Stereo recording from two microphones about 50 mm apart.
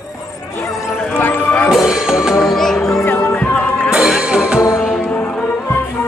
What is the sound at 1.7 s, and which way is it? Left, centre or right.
Music, centre.